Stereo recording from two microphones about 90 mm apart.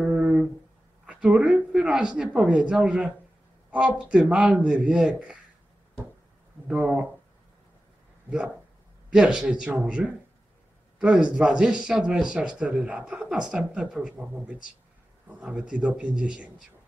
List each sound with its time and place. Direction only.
0.0 s a sound: 15° right (ahead or behind)
1.0 s speech: 10° right (ahead or behind)
6.7 s speech: 10° right (ahead or behind)
9.1 s speech: 5° right (ahead or behind)